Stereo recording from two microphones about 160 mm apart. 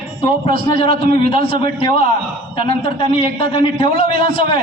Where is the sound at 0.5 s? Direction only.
65° right (ahead or behind).